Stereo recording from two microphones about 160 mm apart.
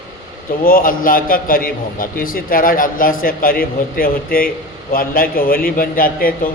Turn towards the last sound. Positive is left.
turn(degrees=65)  # may be behind; listen again after turning